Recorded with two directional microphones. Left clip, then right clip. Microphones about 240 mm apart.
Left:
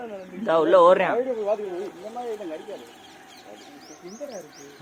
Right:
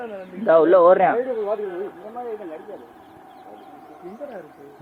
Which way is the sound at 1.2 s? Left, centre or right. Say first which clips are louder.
Right 1 dB; centre.